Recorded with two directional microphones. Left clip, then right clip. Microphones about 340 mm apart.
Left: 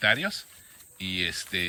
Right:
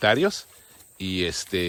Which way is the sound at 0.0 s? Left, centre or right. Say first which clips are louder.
Right 4 dB; centre.